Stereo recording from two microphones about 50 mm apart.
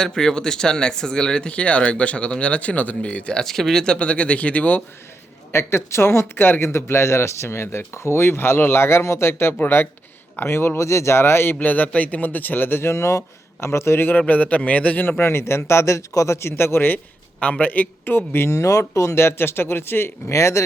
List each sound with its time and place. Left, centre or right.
0.0 s speech: centre
3.3 s speech: centre
3.9 s speech: left
5.5 s speech: left
9.6 s speech: left
10.8 s speech: left
11.6 s speech: left
12.8 s speech: left
14.2 s speech: left
15.0 s speech: left
17.4 s speech: left
18.5 s speech: left
20.3 s a man's voice: left